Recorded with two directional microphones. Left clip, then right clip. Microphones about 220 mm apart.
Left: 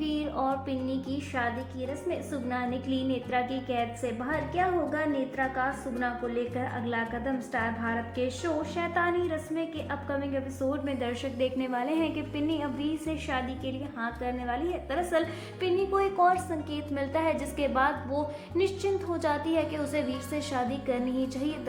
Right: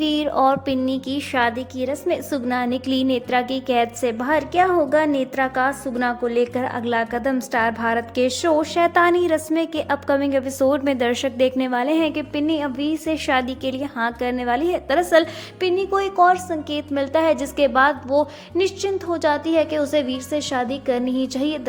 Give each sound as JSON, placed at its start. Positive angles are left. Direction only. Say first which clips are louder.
{"t": 0.0, "sound": "a woman's voice", "louder": "right 12 dB", "side_deg": -40}